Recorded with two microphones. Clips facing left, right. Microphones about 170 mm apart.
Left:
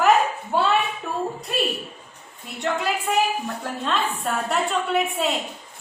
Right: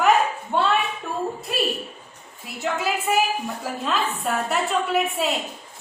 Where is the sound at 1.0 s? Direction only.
Centre (ahead or behind).